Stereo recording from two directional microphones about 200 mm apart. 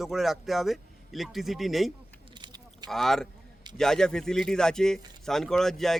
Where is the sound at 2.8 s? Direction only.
Centre (ahead or behind).